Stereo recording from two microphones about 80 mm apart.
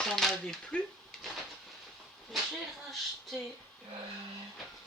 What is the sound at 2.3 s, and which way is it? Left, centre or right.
Speech, centre.